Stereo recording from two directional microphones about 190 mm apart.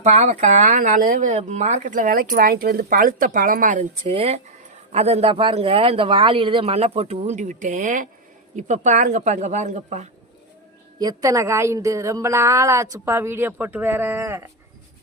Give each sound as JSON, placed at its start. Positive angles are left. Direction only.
{"t": 0.0, "sound": "speech", "side_deg": -40}
{"t": 4.0, "sound": "speech", "side_deg": -30}
{"t": 11.2, "sound": "a woman's voice", "side_deg": -15}